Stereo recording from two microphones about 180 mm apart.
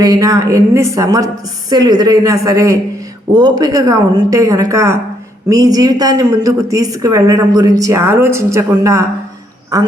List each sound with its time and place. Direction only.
0.0 s a woman's voice: 20° right (ahead or behind)